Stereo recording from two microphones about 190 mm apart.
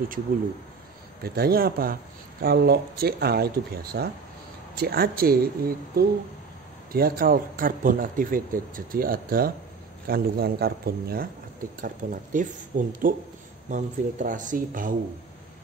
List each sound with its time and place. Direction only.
1.2 s a man's voice: 55° right (ahead or behind)
11.8 s a man's voice: 45° right (ahead or behind)